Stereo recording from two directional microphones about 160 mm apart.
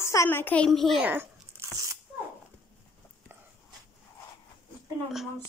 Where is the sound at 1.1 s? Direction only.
15° right (ahead or behind).